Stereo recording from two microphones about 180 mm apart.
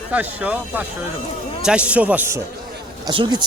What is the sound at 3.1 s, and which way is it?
Speech, 25° right (ahead or behind).